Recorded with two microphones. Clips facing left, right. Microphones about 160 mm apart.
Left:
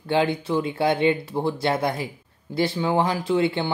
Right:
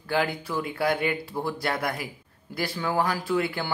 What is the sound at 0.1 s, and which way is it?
Speech, 25° left (ahead or behind).